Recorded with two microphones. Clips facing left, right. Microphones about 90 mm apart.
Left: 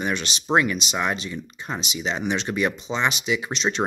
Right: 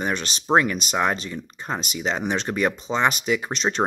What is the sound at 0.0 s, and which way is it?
Speech, 40° right (ahead or behind).